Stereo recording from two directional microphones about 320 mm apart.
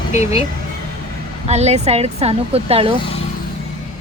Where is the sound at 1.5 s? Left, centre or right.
Centre.